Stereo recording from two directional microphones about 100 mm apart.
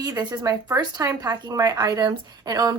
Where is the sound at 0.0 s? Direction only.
40° right (ahead or behind).